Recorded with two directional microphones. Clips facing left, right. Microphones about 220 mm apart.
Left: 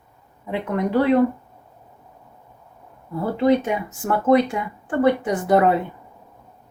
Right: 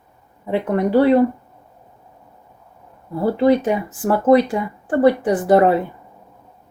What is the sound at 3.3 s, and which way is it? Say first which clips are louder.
Speech: right 2 dB; 30° right (ahead or behind).